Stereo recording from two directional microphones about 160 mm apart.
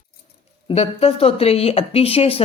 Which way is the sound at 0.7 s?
40° left (ahead or behind).